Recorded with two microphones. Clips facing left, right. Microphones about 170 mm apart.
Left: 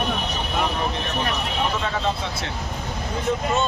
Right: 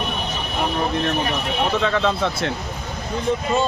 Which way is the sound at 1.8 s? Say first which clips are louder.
Right 5 dB; 75° right (ahead or behind).